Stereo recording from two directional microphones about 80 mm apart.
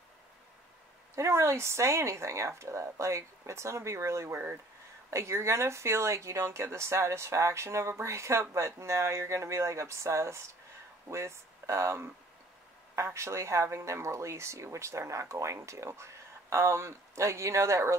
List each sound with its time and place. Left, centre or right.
1.1 s speech: right